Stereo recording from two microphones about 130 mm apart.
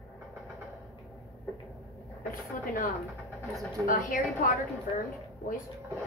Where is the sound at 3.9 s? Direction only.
90° left.